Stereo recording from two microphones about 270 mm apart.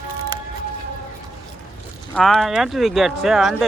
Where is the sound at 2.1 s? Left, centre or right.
Centre.